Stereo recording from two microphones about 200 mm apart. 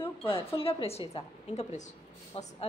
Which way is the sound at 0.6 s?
25° left (ahead or behind).